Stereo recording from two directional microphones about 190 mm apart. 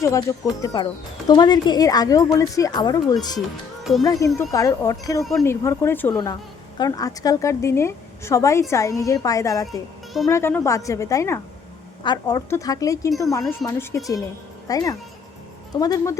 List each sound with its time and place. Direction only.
0.0 s a woman's voice: 15° left (ahead or behind)